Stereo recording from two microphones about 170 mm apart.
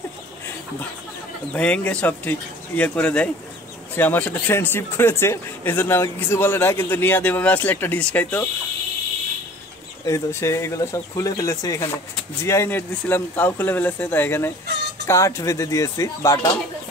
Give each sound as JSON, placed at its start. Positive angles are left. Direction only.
{"t": 1.5, "sound": "speech", "side_deg": 5}
{"t": 10.0, "sound": "speech", "side_deg": 15}